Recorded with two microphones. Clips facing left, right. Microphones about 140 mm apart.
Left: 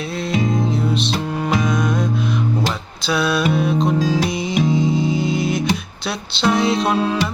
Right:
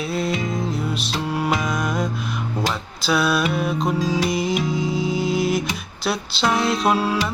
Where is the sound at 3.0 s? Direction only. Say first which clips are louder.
Left 1 dB; centre (ahead or behind).